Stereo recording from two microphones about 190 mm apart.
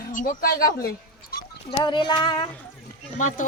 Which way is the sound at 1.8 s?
25° left (ahead or behind).